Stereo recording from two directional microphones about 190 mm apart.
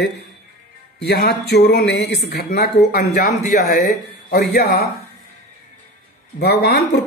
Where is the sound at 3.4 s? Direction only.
40° left (ahead or behind); by 4.9 s 60° left (ahead or behind).